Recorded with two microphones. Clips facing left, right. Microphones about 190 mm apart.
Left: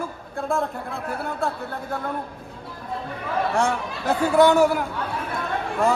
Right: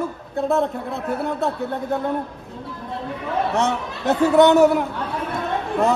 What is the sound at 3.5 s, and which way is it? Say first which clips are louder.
A man's voice: right 1 dB; centre (ahead or behind).